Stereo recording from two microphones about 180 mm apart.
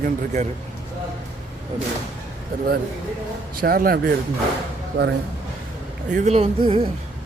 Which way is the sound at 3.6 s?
55° right (ahead or behind).